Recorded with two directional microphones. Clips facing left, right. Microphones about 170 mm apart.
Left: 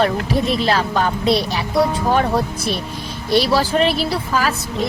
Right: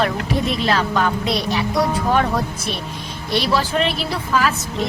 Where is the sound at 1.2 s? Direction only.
30° left (ahead or behind).